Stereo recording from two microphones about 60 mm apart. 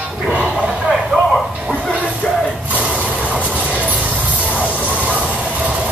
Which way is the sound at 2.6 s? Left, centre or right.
Right.